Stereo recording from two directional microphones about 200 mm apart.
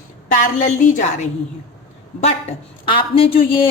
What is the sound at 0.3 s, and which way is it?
A woman's voice, 40° left (ahead or behind).